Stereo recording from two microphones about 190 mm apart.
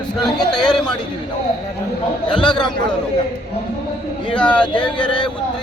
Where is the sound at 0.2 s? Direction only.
Centre (ahead or behind).